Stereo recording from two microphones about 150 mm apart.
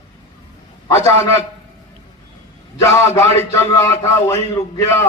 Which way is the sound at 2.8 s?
20° left (ahead or behind).